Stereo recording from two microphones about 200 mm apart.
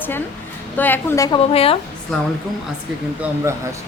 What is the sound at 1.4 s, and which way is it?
Speech, 30° left (ahead or behind).